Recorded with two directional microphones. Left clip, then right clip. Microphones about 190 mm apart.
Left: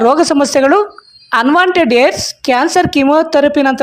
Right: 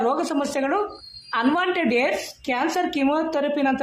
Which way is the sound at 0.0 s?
50° left (ahead or behind).